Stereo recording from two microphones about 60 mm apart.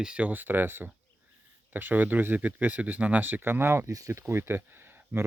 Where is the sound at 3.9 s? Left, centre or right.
Right.